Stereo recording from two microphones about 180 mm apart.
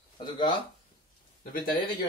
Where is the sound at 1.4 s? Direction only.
55° left (ahead or behind).